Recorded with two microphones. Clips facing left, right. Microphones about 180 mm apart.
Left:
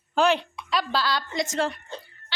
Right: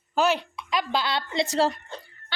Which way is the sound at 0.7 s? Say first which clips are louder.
Even; 15° right (ahead or behind).